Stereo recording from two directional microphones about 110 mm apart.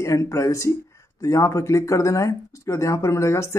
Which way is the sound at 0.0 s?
30° left (ahead or behind).